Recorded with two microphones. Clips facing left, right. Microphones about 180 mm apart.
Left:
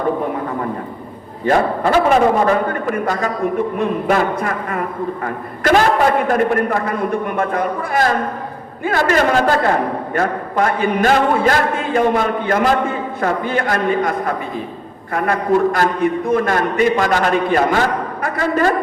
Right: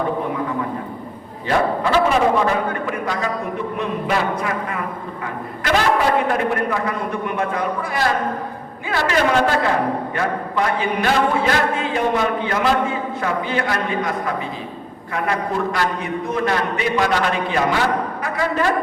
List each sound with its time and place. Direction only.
1.5 s a man's voice: 50° left (ahead or behind)